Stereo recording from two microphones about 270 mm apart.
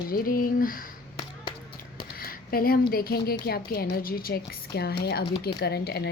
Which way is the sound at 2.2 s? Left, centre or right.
Left.